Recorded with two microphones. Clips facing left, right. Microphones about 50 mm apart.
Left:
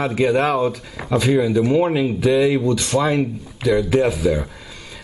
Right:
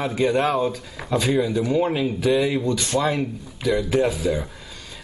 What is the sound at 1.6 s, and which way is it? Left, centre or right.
Speech, left.